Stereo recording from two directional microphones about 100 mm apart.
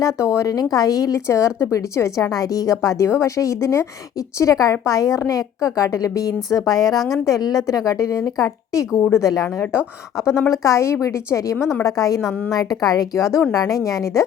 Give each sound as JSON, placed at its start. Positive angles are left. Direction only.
{"t": 0.0, "sound": "a woman's voice", "side_deg": 30}